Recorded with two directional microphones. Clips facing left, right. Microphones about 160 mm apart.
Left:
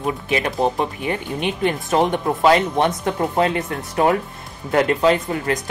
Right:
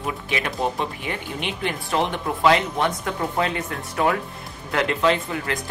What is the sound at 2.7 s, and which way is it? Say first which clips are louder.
Speech: left 5 dB; 25° left (ahead or behind).